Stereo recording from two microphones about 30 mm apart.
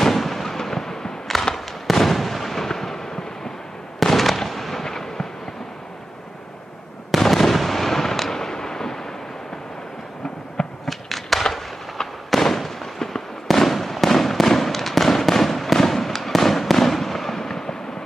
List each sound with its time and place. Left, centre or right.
0.0 s fireworks: centre
4.0 s fireworks: centre
4.8 s fireworks: centre
7.2 s fireworks: centre
10.9 s a sound: centre
12.3 s fireworks: centre
17.4 s fireworks: centre